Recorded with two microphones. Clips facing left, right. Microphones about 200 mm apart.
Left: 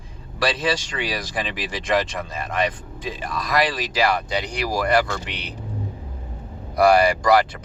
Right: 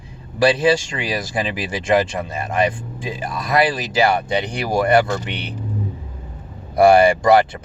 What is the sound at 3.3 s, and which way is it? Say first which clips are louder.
Speech: right 4 dB; 25° right (ahead or behind).